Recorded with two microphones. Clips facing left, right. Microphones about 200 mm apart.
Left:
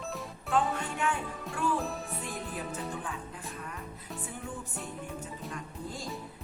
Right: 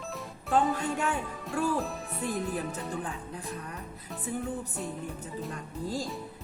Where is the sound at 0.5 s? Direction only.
40° right (ahead or behind).